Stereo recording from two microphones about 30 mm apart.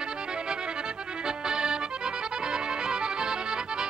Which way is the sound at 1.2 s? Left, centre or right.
Right.